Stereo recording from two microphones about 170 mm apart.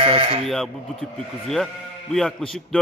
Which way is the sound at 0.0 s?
35° right (ahead or behind).